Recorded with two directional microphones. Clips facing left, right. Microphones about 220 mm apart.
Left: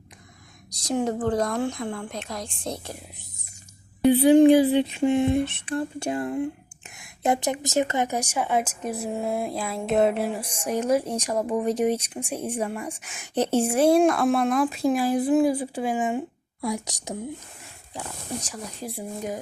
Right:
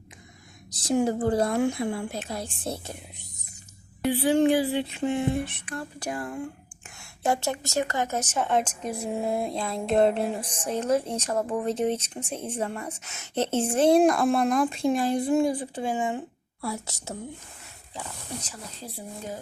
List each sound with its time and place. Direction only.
0.7 s speech: 5° right (ahead or behind)
4.0 s a sound: 20° left (ahead or behind)
9.0 s music: centre (ahead or behind)